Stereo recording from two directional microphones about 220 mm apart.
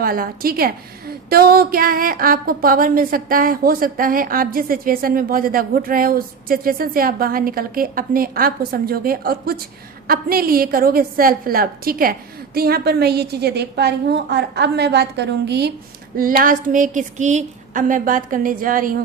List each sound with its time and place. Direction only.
0.0 s a woman's voice: 40° right (ahead or behind)